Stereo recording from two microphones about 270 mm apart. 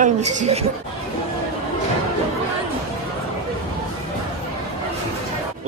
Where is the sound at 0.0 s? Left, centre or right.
Right.